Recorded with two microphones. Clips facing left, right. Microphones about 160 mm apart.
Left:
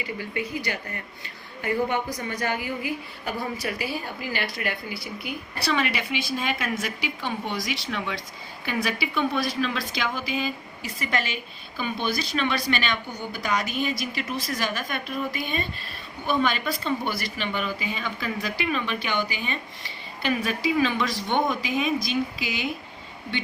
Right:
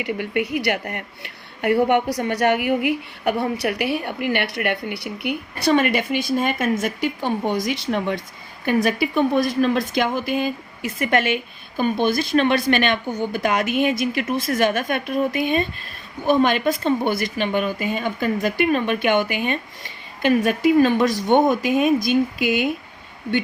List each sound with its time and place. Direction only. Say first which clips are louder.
0.0 s a woman's voice: right 7 dB; 70° right (ahead or behind)
5.6 s speech: right 8 dB; 50° right (ahead or behind)
11.8 s speech: right 8 dB; 50° right (ahead or behind)